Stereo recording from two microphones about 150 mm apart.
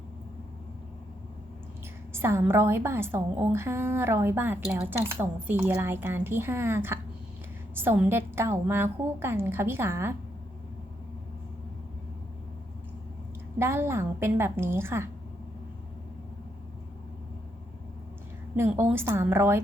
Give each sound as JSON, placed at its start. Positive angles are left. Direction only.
{"t": 2.1, "sound": "a woman's voice", "side_deg": -15}
{"t": 13.6, "sound": "a woman's voice", "side_deg": -15}
{"t": 18.5, "sound": "a woman's voice", "side_deg": -15}